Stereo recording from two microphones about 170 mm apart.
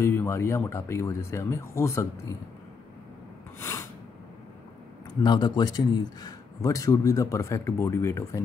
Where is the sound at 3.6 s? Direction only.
15° left (ahead or behind).